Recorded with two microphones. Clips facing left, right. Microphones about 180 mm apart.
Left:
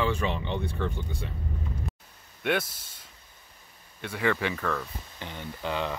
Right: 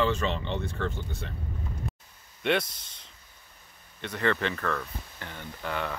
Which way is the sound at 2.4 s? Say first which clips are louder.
Right 1 dB; 5° left (ahead or behind).